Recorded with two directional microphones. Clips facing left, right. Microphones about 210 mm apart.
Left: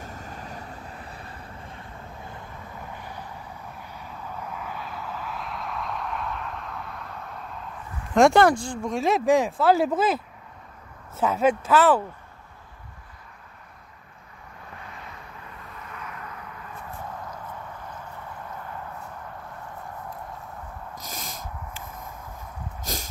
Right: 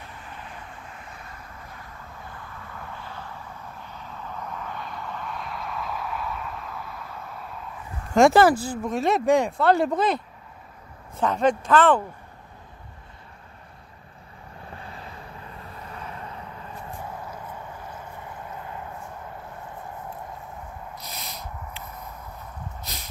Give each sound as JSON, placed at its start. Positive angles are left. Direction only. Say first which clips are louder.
{"t": 0.0, "sound": "vehicle", "louder": "left 3 dB", "side_deg": 45}
{"t": 3.0, "sound": "vehicle", "louder": "even", "side_deg": 15}
{"t": 8.1, "sound": "speech", "louder": "right 1 dB", "side_deg": 0}
{"t": 14.7, "sound": "vehicle", "louder": "right 2 dB", "side_deg": -30}